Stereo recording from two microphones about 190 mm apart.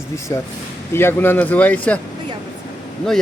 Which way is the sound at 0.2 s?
15° left (ahead or behind).